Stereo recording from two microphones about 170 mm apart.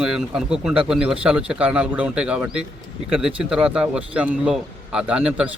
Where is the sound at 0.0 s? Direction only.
5° right (ahead or behind).